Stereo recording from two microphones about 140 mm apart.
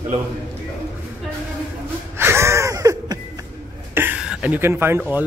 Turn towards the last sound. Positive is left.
turn(degrees=-15)  # may be behind; listen again after turning